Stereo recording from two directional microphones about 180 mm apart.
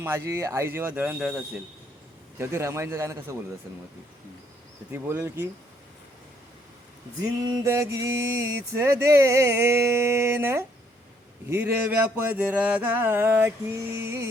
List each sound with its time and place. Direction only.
0.0 s mantra: 15° right (ahead or behind)
2.4 s mantra: 15° right (ahead or behind)
4.9 s mantra: 10° right (ahead or behind)
7.2 s mantra: 20° right (ahead or behind)